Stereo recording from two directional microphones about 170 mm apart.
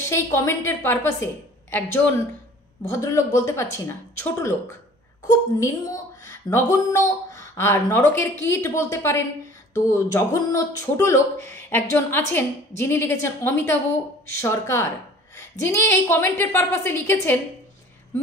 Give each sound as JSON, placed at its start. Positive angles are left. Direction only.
{"t": 0.1, "sound": "a woman's voice", "side_deg": 15}